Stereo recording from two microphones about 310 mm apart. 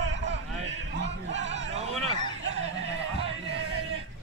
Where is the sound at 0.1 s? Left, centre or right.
Right.